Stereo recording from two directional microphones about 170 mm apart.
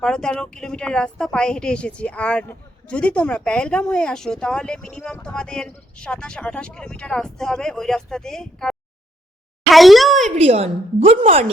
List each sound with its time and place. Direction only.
0.0 s a woman's voice: 5° left (ahead or behind)
9.7 s a sound: centre (ahead or behind)
10.2 s a woman's voice: 40° right (ahead or behind)